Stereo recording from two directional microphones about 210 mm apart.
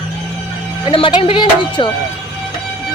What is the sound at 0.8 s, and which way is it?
A woman's voice, 25° left (ahead or behind).